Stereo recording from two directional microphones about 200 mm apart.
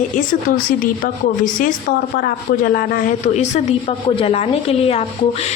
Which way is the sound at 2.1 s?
50° left (ahead or behind).